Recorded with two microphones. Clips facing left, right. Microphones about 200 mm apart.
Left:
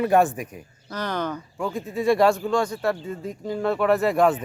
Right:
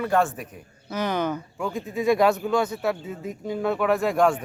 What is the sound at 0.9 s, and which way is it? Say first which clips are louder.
Speech: right 2 dB; 10° right (ahead or behind).